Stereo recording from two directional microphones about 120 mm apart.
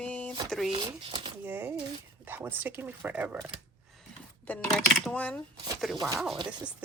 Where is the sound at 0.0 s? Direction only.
10° left (ahead or behind).